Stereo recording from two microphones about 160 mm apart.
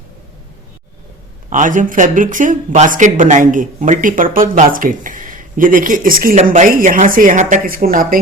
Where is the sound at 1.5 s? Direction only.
55° right (ahead or behind).